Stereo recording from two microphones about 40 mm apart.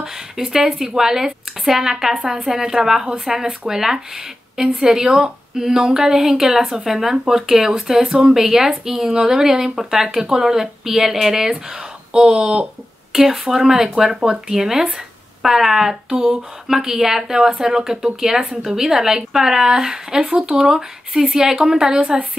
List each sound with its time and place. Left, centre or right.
0.0 s speech: centre
12.1 s speech: right
13.1 s speech: centre